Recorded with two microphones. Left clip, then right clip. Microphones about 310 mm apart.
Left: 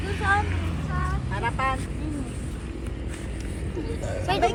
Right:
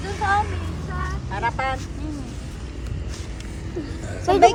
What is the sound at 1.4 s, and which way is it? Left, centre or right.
Speech, right.